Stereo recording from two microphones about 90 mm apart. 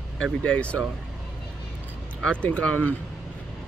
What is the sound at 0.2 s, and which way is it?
Speech, 10° left (ahead or behind).